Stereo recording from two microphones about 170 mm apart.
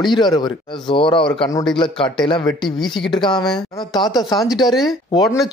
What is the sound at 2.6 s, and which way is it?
Speech, centre (ahead or behind).